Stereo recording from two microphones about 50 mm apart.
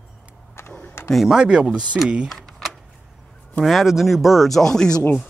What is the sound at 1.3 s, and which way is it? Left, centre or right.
Speech, centre.